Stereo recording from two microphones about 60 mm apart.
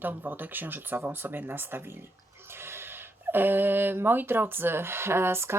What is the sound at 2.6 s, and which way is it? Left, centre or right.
Gasp, right.